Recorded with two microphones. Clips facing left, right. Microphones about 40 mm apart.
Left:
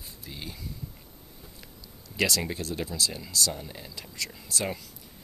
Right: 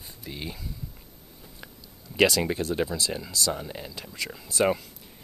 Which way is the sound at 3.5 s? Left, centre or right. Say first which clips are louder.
Right 5 dB; right.